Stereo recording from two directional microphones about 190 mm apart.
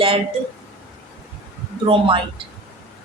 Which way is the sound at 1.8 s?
30° right (ahead or behind).